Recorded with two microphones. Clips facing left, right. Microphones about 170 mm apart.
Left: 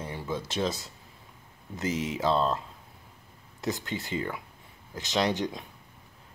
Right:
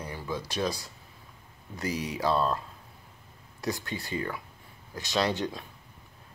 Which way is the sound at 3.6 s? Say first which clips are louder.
Left 1 dB; 20° left (ahead or behind).